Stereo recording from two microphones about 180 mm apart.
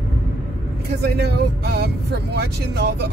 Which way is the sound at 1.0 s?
65° right (ahead or behind).